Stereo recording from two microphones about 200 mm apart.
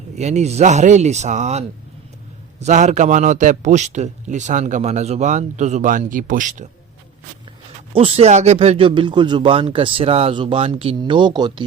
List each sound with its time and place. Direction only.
0.2 s a man's voice: 35° right (ahead or behind)
7.9 s speech: 30° right (ahead or behind)